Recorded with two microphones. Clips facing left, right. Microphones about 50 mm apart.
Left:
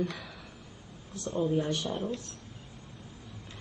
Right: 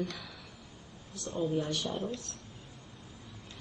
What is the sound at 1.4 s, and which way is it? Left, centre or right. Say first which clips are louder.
Speech: left 3 dB; centre.